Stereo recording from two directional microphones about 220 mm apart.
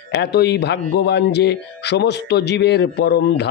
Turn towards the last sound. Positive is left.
turn(degrees=50)  # may be behind; listen again after turning